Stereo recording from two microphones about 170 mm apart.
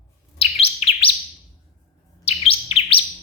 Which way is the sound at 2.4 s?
35° left (ahead or behind).